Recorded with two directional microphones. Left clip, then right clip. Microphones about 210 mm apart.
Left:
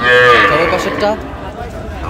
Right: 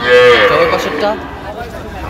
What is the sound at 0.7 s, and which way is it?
Speech, 10° left (ahead or behind).